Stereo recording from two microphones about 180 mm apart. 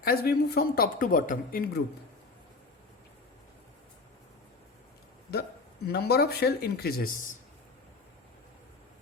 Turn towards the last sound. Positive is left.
turn(degrees=50)  # may be behind; listen again after turning